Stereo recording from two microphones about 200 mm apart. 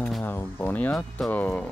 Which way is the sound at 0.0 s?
10° left (ahead or behind).